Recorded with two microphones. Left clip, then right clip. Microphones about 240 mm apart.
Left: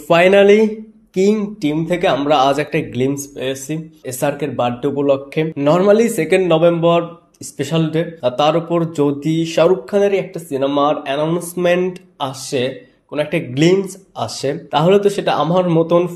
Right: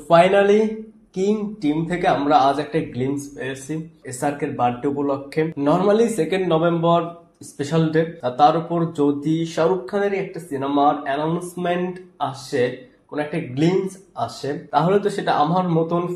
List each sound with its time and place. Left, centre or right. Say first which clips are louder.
0.1 s speech: left 4 dB; left
4.8 s speech: left 7 dB; left